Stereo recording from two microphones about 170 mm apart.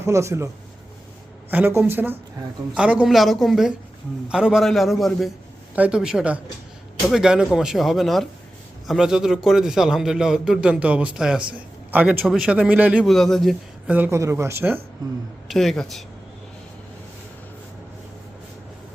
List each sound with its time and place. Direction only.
0.0 s a man's voice: 15° right (ahead or behind)
15.4 s a man's voice: centre (ahead or behind)